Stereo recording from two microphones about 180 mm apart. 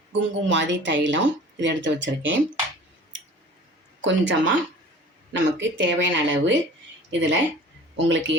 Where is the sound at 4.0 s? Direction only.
90° right.